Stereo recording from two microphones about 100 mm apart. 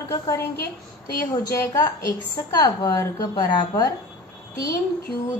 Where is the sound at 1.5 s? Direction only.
35° left (ahead or behind).